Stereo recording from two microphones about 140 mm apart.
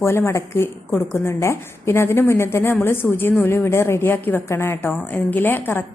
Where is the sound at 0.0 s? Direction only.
20° left (ahead or behind).